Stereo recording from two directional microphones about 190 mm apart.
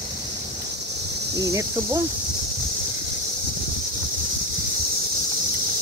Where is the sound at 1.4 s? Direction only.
15° right (ahead or behind).